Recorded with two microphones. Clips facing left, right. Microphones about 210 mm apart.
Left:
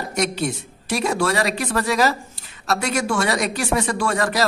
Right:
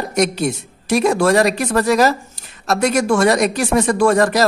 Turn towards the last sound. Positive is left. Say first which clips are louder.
# right 7 dB
turn(degrees=-45)  # may be behind; listen again after turning